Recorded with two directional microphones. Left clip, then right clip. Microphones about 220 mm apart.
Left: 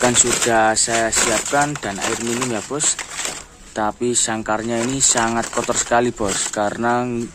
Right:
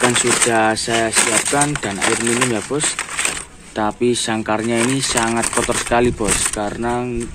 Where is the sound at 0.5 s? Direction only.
10° left (ahead or behind).